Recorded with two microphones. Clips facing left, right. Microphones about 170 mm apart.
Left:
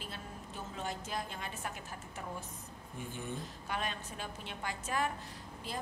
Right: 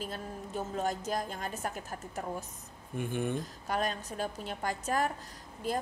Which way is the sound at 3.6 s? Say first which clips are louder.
Right 6 dB; 40° right (ahead or behind).